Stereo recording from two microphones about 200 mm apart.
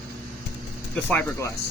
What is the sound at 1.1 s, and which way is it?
Speech, 10° left (ahead or behind).